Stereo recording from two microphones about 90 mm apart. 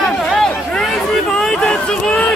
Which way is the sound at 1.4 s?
10° left (ahead or behind).